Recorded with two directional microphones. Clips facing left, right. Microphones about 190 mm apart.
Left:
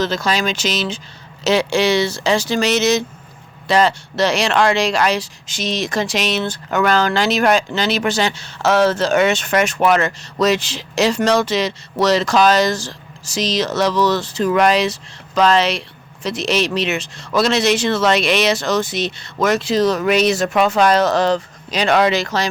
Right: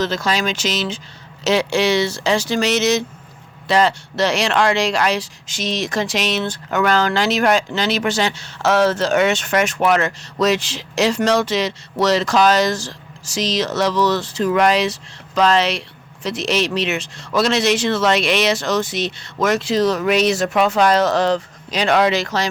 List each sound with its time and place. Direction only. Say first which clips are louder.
0.0 s speech: left 1 dB; 35° left (ahead or behind)